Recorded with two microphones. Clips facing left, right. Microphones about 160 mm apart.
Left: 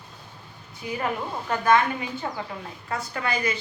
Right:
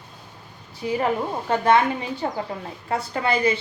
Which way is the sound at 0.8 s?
30° right (ahead or behind).